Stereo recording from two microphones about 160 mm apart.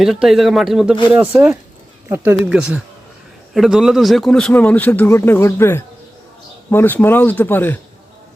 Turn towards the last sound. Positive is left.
turn(degrees=10)  # may be behind; listen again after turning